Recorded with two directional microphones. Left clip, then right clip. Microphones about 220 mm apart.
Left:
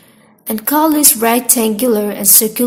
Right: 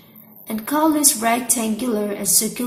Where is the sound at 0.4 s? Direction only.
50° left (ahead or behind).